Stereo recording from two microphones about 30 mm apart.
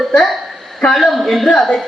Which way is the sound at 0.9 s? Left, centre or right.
Centre.